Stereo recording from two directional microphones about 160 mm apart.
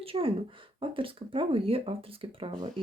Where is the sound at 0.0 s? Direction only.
35° right (ahead or behind).